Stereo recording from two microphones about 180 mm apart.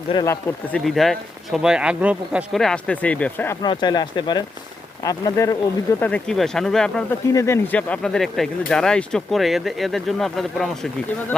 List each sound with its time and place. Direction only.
0.1 s speech: 20° left (ahead or behind)
0.7 s speech: centre (ahead or behind)
3.7 s speech: 25° left (ahead or behind)
6.0 s speech: 5° left (ahead or behind)
7.3 s speech: 15° left (ahead or behind)